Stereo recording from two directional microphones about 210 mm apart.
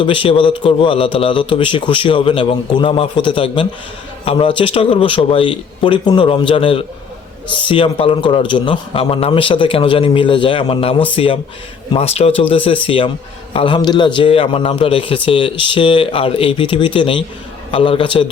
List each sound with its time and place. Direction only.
0.0 s a man's voice: 25° left (ahead or behind)